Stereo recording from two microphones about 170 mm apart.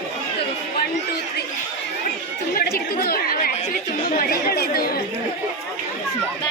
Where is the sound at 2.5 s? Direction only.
65° left (ahead or behind).